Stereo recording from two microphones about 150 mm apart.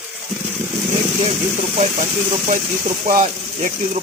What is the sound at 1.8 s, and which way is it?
Speech, 50° right (ahead or behind).